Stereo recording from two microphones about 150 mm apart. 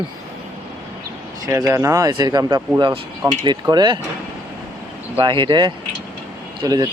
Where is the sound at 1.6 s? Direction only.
20° right (ahead or behind).